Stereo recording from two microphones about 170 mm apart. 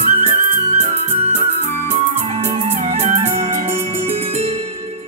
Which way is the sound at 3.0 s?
40° right (ahead or behind).